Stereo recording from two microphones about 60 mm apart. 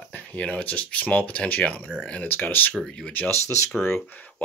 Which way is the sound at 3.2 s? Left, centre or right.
Left.